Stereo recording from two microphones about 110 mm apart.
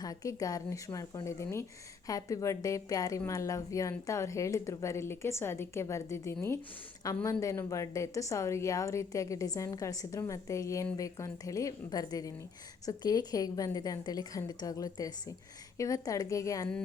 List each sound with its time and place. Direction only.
0.0 s a woman's voice: 35° left (ahead or behind)